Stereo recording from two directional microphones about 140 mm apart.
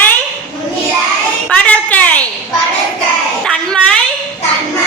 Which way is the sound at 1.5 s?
10° left (ahead or behind).